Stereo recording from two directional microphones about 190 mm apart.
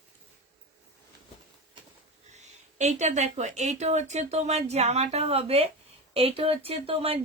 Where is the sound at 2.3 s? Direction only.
40° right (ahead or behind).